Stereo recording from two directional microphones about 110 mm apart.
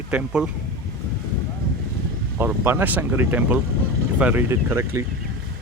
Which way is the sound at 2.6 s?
15° right (ahead or behind).